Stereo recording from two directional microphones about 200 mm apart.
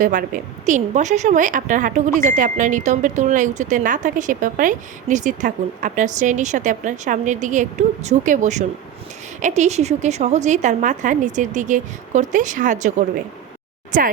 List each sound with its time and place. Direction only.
0.0 s speech: 40° right (ahead or behind)
13.9 s speech: 40° right (ahead or behind)